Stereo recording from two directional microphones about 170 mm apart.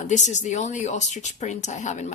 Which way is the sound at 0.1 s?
45° left (ahead or behind).